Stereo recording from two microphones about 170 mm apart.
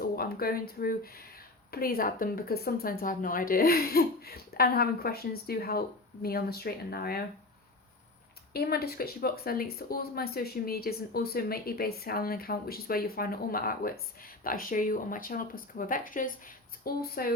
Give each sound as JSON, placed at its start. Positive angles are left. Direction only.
{"t": 0.0, "sound": "speech", "side_deg": 60}
{"t": 8.5, "sound": "speech", "side_deg": 65}